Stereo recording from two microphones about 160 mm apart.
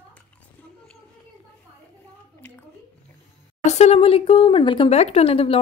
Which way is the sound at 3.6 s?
45° left (ahead or behind).